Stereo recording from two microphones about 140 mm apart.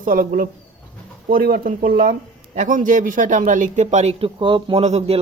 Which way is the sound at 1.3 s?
90° right.